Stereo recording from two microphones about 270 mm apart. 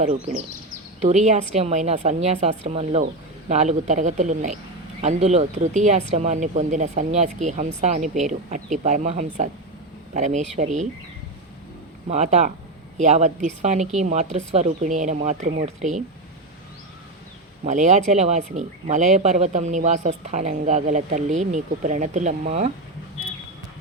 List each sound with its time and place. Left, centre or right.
0.0 s speech: right
12.0 s speech: right
17.7 s speech: right